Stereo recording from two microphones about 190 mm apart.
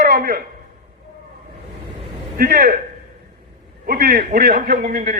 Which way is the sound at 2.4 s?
45° right (ahead or behind).